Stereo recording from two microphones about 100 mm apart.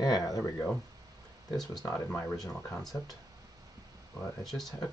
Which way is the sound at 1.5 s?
5° left (ahead or behind).